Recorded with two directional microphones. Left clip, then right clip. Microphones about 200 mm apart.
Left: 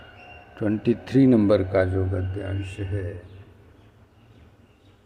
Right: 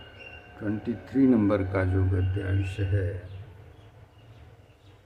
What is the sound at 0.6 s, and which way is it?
Speech, 30° left (ahead or behind).